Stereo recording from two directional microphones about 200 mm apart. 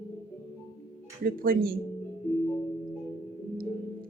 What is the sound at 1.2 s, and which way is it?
Speech, 45° right (ahead or behind).